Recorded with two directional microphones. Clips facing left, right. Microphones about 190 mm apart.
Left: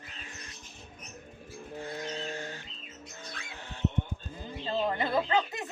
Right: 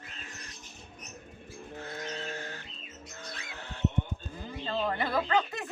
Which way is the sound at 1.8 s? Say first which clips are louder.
Left 2 dB; 10° left (ahead or behind).